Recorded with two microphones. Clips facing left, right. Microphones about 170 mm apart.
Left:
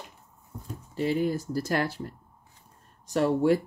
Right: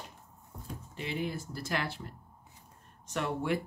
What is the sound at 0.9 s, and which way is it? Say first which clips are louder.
Speech: left 10 dB; 40° left (ahead or behind).